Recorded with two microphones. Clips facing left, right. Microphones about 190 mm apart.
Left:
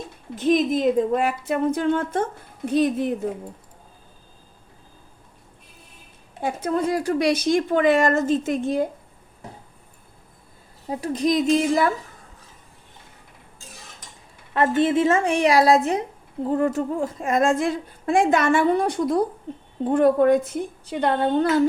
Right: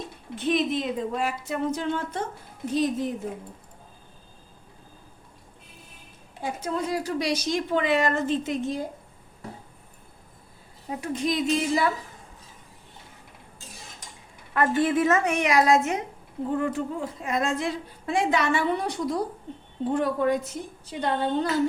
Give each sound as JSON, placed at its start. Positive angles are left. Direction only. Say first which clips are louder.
{"t": 0.3, "sound": "a woman's voice", "louder": "left 5 dB", "side_deg": 45}
{"t": 6.4, "sound": "a woman's voice", "louder": "left 6 dB", "side_deg": 55}
{"t": 10.8, "sound": "a woman's voice", "louder": "left 5 dB", "side_deg": 35}
{"t": 14.8, "sound": "a woman's voice", "louder": "left 3 dB", "side_deg": 25}
{"t": 20.9, "sound": "a woman's voice", "louder": "left 5 dB", "side_deg": 65}